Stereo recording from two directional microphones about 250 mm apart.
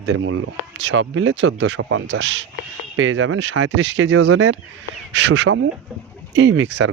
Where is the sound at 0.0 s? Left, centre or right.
Right.